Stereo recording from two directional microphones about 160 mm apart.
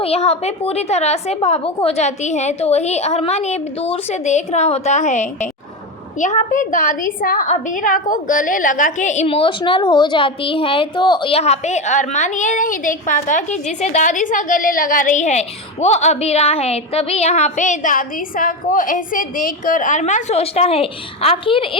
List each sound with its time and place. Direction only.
0.0 s a woman's voice: 40° left (ahead or behind)
9.2 s a woman's voice: 35° left (ahead or behind)